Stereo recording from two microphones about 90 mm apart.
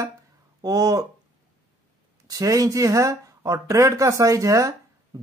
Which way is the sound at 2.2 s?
40° right (ahead or behind).